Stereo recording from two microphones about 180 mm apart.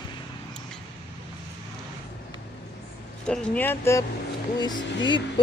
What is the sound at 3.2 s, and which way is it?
Speech, 5° left (ahead or behind).